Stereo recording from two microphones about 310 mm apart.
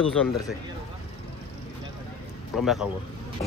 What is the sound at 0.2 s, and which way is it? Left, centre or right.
Speech, centre.